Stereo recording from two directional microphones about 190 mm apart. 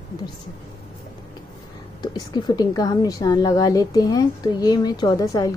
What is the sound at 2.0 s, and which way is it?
A woman's voice, 20° left (ahead or behind).